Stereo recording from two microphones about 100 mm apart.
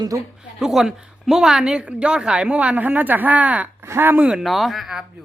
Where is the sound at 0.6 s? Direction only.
5° right (ahead or behind).